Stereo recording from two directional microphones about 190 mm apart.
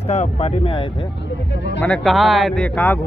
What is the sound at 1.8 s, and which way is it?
Speech, 5° left (ahead or behind).